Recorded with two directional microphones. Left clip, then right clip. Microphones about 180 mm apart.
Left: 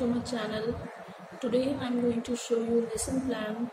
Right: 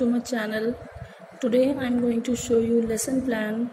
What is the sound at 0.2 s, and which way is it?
A woman's voice, 35° right (ahead or behind).